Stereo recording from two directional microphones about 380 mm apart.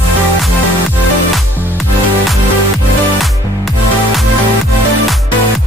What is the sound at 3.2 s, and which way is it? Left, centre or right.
Music, centre.